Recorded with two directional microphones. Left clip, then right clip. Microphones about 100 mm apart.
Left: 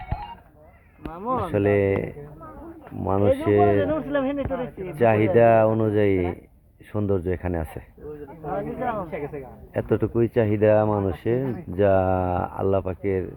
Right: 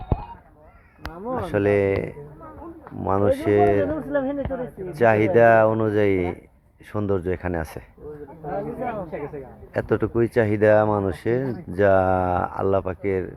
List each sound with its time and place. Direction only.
1.2 s speech: 45° right (ahead or behind)
1.5 s speech: 30° left (ahead or behind)
3.2 s speech: 30° left (ahead or behind)
3.8 s speech: 45° right (ahead or behind)
4.9 s speech: 30° left (ahead or behind)
8.4 s speech: 40° right (ahead or behind)
9.7 s speech: 25° left (ahead or behind)